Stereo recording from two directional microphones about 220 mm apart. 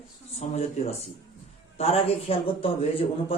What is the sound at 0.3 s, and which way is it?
A man's voice, 30° left (ahead or behind).